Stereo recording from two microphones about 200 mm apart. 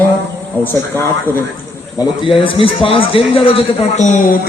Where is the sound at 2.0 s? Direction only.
25° left (ahead or behind).